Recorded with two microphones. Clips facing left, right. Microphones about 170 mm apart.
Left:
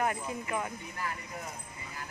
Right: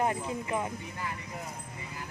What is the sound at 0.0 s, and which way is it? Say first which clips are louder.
Speech: right 2 dB; 25° right (ahead or behind).